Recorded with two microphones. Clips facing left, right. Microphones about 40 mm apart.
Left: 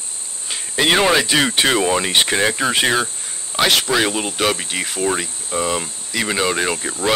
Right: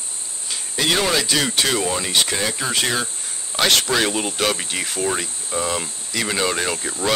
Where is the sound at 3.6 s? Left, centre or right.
Centre.